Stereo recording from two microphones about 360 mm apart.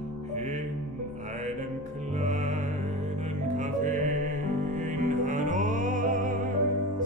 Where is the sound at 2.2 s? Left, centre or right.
Centre.